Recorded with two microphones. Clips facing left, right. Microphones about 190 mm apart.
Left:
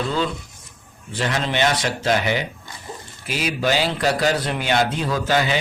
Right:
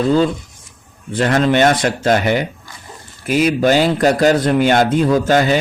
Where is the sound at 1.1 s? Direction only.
55° right (ahead or behind).